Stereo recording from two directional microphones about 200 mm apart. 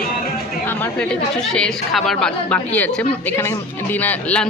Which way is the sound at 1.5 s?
Centre (ahead or behind).